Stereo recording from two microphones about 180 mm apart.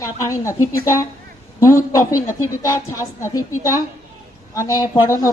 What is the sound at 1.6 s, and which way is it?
A woman's voice, 15° left (ahead or behind).